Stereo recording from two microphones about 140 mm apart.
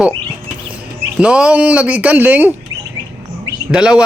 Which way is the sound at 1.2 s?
5° right (ahead or behind).